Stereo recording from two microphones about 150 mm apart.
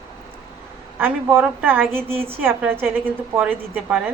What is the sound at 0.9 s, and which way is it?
A woman's voice, 15° right (ahead or behind).